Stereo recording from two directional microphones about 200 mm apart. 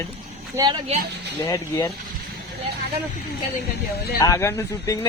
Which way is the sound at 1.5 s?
15° left (ahead or behind).